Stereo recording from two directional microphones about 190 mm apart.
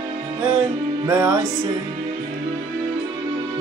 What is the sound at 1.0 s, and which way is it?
Music, 15° right (ahead or behind).